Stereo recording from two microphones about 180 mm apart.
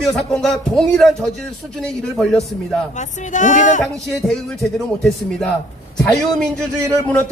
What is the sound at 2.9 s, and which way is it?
Speech, 40° left (ahead or behind).